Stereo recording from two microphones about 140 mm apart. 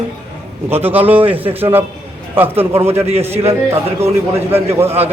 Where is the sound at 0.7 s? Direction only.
15° right (ahead or behind).